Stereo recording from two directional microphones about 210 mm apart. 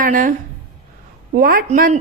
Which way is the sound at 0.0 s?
40° right (ahead or behind).